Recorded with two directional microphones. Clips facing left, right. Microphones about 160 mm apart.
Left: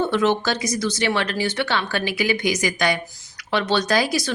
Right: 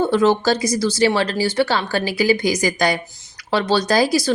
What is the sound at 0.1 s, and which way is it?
Speech, 35° right (ahead or behind).